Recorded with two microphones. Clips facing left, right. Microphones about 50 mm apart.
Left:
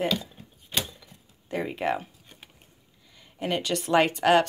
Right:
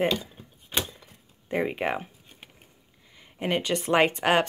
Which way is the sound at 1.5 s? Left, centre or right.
Right.